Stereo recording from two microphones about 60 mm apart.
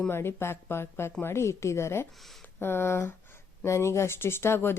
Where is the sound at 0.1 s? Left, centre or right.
Left.